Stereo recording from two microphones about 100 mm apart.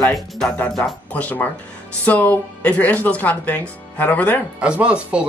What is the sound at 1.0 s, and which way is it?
Speech, 15° left (ahead or behind).